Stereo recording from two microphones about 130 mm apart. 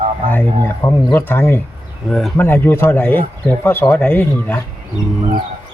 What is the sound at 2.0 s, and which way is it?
Speech, 5° left (ahead or behind).